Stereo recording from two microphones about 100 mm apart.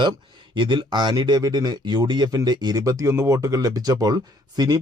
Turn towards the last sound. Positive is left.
turn(degrees=-45)  # may be behind; listen again after turning